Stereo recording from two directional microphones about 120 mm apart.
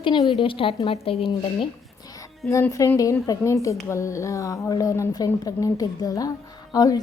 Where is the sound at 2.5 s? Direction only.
25° left (ahead or behind).